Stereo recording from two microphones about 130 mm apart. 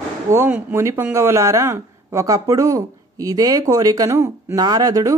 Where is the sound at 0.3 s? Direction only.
15° right (ahead or behind).